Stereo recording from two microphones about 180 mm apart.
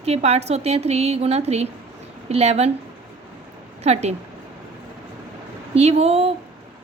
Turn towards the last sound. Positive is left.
turn(degrees=-35)  # may be behind; listen again after turning